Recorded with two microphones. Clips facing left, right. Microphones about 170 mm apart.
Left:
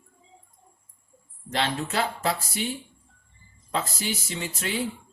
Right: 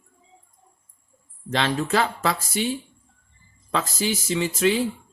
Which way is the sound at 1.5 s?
90° right.